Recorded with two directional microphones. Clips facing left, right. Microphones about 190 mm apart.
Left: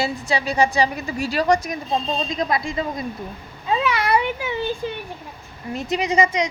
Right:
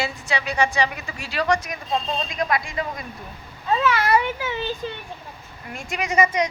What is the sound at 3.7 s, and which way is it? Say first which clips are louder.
A child's voice: even; 15° left (ahead or behind).